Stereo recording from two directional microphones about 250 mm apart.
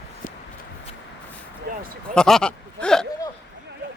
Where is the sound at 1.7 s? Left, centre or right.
Right.